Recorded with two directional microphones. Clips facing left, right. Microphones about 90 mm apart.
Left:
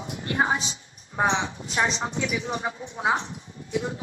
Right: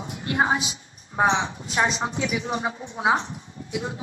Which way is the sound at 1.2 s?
35° right (ahead or behind).